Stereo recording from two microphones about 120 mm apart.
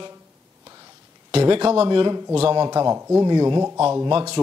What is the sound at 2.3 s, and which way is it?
Speech, 55° right (ahead or behind).